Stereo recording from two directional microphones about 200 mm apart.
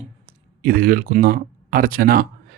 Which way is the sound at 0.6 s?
45° right (ahead or behind).